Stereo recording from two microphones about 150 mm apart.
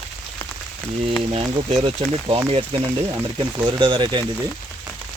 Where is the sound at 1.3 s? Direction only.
45° right (ahead or behind).